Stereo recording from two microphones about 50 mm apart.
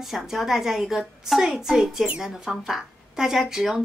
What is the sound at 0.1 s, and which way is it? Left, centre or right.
Speech, centre.